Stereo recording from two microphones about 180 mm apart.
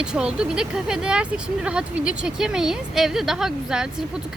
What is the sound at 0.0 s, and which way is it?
Speech, 5° right (ahead or behind).